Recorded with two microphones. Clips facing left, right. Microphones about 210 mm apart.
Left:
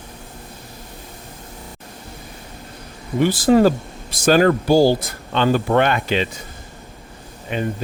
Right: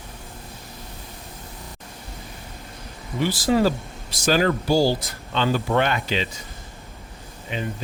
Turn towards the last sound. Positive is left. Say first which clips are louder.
# left 6 dB
turn(degrees=55)  # may be behind; listen again after turning